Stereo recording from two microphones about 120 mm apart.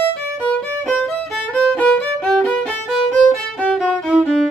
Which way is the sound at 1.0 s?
10° left (ahead or behind).